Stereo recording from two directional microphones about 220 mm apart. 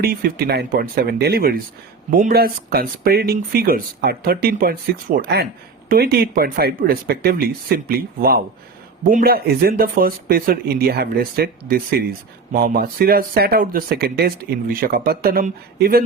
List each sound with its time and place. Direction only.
0.0 s speech: 40° right (ahead or behind)